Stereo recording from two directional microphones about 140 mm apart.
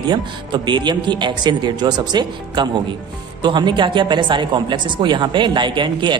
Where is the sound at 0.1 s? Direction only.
30° right (ahead or behind).